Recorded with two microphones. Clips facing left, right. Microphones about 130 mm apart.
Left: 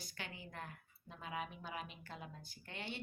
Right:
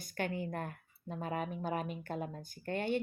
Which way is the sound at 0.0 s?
50° right (ahead or behind).